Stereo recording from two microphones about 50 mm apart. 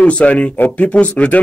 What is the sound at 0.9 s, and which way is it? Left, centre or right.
Speech, left.